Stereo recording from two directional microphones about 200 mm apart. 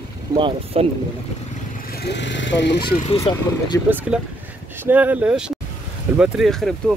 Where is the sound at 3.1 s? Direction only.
20° left (ahead or behind).